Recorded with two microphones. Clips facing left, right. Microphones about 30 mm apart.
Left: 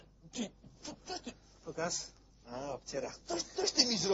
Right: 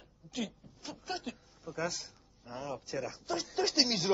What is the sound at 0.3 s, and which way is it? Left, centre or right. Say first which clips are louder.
Speech: right 3 dB; centre.